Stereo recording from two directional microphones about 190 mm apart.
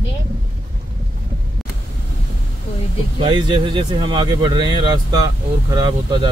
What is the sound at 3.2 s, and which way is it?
Speech, 25° right (ahead or behind).